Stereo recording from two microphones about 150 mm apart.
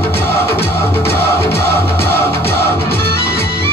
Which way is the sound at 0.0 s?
15° left (ahead or behind).